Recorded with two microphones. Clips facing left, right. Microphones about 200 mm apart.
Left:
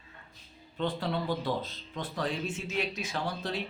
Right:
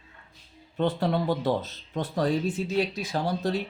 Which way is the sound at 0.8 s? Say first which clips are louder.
Right 6 dB; 45° right (ahead or behind).